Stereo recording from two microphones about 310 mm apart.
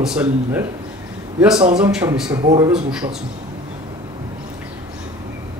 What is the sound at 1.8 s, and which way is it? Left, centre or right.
Speech, centre.